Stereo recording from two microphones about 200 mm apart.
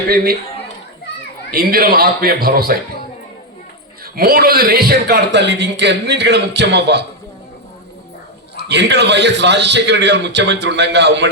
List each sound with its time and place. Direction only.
1.5 s a man's voice: 50° right (ahead or behind)
4.0 s a man's voice: 50° right (ahead or behind)
8.5 s a man's voice: 60° right (ahead or behind)